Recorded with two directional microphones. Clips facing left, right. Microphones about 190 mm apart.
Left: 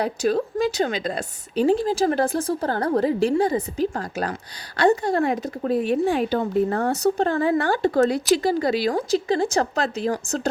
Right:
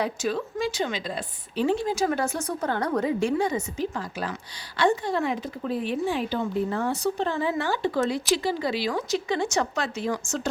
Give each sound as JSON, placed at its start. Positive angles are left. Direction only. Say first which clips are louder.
{"t": 0.0, "sound": "speech", "louder": "left 5 dB", "side_deg": 40}